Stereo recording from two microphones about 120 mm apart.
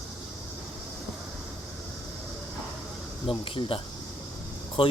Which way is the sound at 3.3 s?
45° left (ahead or behind).